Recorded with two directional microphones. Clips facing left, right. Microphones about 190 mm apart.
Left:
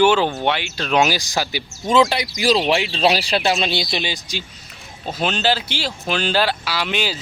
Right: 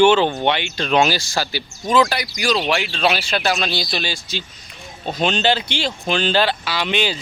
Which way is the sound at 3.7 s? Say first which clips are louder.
Left 1 dB; 20° left (ahead or behind).